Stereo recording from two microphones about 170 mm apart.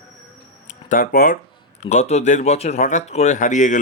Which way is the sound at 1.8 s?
40° left (ahead or behind).